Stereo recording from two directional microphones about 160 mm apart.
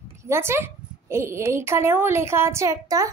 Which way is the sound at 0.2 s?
15° right (ahead or behind).